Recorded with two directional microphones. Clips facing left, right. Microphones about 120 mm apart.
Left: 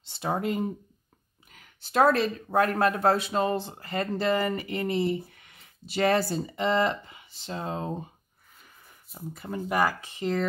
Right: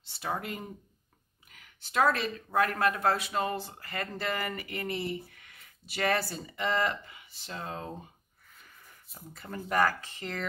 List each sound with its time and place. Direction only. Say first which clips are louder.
0.0 s speech: left 6 dB; 25° left (ahead or behind)
1.5 s speech: left 5 dB; 35° left (ahead or behind)
9.3 s speech: left 3 dB; 15° left (ahead or behind)